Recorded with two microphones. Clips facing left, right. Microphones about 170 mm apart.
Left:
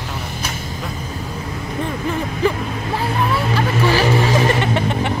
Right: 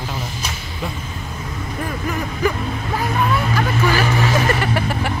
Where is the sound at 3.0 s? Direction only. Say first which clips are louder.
Even; 30° left (ahead or behind).